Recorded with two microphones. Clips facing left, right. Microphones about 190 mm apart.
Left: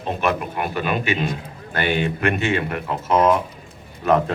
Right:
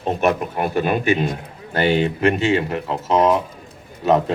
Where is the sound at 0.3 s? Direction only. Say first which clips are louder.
Right 3 dB; 40° right (ahead or behind).